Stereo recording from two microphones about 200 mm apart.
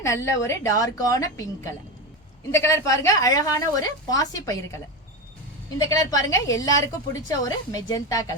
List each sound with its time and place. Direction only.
0.0 s a woman's voice: 15° left (ahead or behind)
5.8 s a woman's voice: 20° left (ahead or behind)